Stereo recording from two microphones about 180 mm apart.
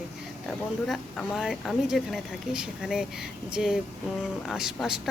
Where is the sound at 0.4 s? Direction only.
Centre (ahead or behind).